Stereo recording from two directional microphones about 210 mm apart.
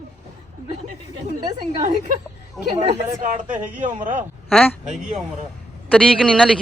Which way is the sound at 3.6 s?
10° right (ahead or behind).